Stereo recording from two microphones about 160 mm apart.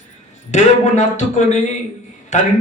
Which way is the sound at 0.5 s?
45° left (ahead or behind).